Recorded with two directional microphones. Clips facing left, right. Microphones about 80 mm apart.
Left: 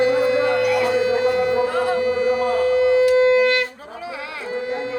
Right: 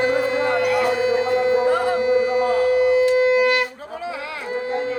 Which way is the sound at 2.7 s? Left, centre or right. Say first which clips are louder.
Left 3 dB; right.